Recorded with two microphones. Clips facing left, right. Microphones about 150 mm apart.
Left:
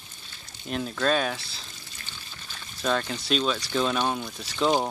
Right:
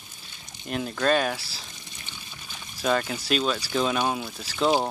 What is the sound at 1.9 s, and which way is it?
Speech, 15° right (ahead or behind).